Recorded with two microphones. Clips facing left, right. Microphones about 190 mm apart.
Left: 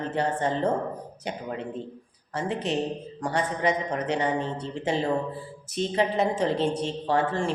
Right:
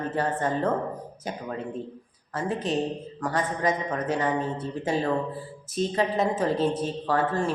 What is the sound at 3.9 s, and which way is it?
Speech, 15° left (ahead or behind).